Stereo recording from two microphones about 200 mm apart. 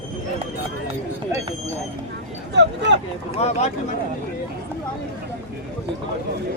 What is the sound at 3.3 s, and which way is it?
Speech, 30° left (ahead or behind).